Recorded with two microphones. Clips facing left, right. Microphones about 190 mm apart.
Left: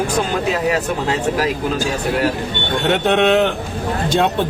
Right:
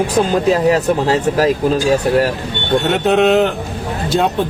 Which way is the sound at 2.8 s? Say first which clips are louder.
Right 1 dB; centre (ahead or behind).